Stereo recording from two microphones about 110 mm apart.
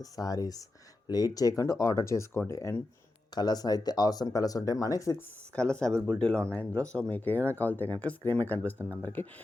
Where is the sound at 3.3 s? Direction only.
35° left (ahead or behind).